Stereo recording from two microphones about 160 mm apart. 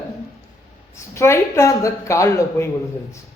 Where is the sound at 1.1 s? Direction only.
15° left (ahead or behind).